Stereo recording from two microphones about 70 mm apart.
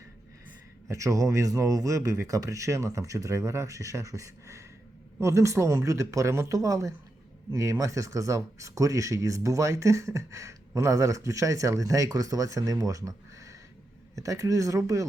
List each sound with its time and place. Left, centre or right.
0.9 s speech: right